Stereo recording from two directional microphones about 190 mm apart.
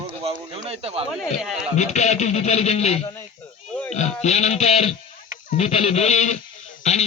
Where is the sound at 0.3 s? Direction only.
30° right (ahead or behind).